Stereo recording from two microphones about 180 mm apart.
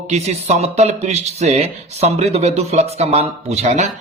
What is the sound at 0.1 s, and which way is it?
Speech, 40° right (ahead or behind).